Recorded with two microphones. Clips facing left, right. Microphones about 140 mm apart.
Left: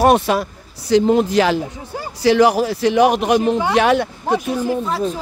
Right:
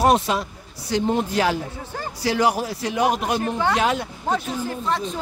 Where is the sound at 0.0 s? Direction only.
65° left (ahead or behind).